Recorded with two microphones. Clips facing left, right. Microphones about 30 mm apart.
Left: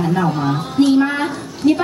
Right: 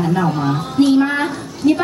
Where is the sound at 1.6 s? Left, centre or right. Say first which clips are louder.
Even; left.